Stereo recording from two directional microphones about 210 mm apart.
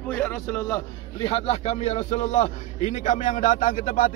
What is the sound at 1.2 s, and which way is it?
A man's voice, 30° left (ahead or behind).